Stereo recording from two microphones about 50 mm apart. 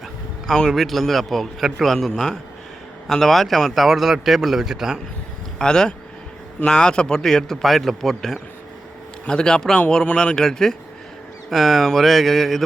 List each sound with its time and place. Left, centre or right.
0.4 s a man's voice: centre
5.5 s a man's voice: centre